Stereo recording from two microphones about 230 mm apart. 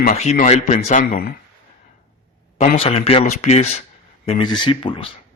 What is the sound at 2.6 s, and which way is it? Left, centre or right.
Speech, left.